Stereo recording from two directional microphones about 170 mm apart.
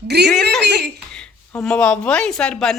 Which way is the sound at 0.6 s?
80° right.